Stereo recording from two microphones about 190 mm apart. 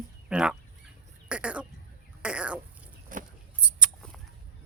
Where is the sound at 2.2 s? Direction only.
5° right (ahead or behind).